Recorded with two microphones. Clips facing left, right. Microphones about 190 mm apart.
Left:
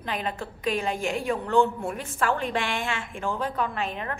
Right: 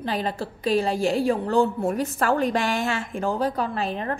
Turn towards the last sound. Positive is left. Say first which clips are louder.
# right 4 dB
turn(degrees=-35)  # may be behind; listen again after turning